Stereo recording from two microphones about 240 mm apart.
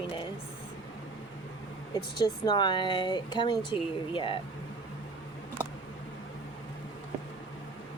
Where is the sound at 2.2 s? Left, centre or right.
Centre.